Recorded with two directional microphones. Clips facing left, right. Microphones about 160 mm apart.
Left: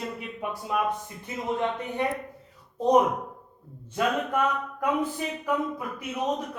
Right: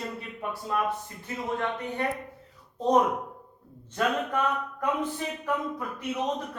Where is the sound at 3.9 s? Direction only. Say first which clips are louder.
Left 1 dB; 5° left (ahead or behind).